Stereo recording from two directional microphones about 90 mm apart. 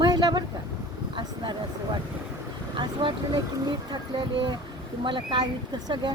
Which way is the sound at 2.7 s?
60° right (ahead or behind).